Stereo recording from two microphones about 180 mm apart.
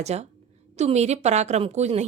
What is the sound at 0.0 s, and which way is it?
Speech, 35° right (ahead or behind).